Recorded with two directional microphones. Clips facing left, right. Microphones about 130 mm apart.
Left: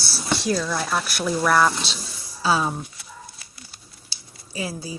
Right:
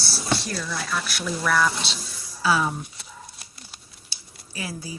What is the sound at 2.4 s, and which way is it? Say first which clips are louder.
Speech: left 1 dB; 25° left (ahead or behind).